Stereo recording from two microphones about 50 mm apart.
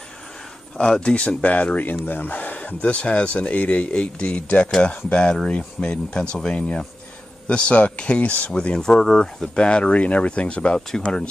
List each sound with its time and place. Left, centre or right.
0.7 s speech: centre
8.5 s speech: centre